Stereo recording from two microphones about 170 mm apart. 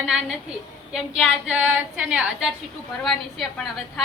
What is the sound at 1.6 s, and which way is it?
A woman's voice, 10° right (ahead or behind).